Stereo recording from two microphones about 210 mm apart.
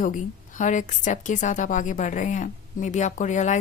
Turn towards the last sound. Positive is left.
turn(degrees=35)  # may be behind; listen again after turning